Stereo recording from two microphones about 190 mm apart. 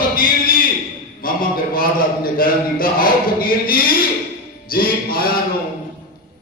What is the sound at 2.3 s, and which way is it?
Speech, 50° left (ahead or behind).